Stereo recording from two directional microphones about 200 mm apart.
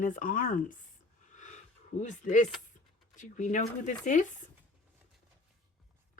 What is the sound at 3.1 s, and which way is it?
Speech, 40° left (ahead or behind).